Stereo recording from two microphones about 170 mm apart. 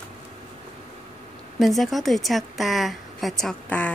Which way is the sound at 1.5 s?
Centre (ahead or behind).